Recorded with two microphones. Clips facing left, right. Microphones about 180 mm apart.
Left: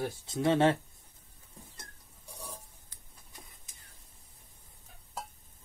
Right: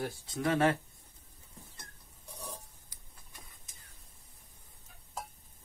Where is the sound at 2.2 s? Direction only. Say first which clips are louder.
Right 1 dB; 10° left (ahead or behind).